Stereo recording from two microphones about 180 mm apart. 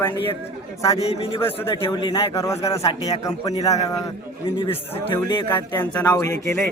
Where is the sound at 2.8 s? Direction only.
35° left (ahead or behind).